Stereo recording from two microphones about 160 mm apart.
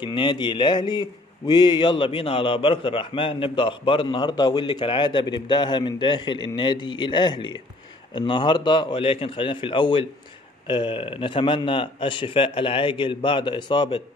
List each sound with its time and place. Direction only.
0.0 s a man's voice: 30° left (ahead or behind)